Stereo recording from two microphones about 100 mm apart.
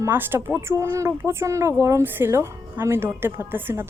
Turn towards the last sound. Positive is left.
turn(degrees=-20)  # may be behind; listen again after turning